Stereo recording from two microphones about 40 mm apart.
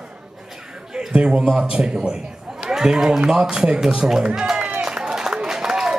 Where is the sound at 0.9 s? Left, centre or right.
Right.